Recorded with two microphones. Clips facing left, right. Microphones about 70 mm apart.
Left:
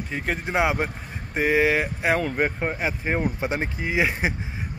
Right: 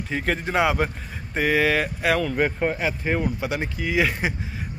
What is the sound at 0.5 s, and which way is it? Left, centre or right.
Speech, centre.